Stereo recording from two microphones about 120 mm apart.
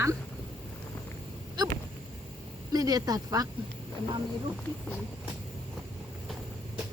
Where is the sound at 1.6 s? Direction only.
35° right (ahead or behind).